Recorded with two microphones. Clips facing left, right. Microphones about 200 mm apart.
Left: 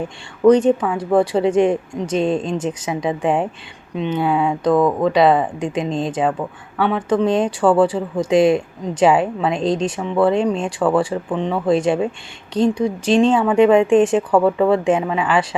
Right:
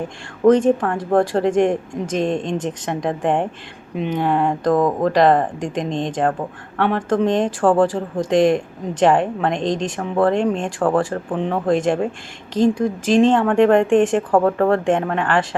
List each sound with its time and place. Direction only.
0.4 s a woman's voice: centre (ahead or behind)
4.7 s speech: 15° right (ahead or behind)
5.0 s a woman's voice: centre (ahead or behind)